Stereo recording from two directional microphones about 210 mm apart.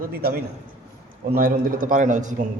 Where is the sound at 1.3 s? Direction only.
45° right (ahead or behind).